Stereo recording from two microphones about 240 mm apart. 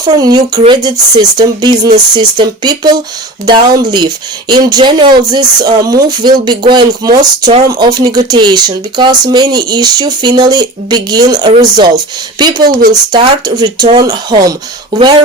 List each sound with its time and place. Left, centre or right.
0.0 s speech: centre